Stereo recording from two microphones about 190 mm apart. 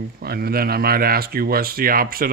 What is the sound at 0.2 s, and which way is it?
Speech, 55° right (ahead or behind).